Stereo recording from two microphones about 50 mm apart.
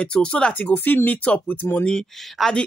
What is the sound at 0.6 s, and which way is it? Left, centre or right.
Speech, left.